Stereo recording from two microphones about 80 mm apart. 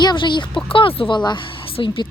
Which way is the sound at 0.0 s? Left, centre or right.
Left.